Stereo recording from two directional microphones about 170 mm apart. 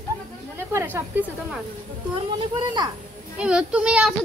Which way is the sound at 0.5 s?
15° right (ahead or behind).